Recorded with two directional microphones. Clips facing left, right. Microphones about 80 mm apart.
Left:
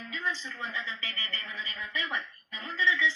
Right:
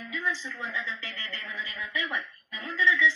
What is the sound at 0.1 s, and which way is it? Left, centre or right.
A woman's voice, right.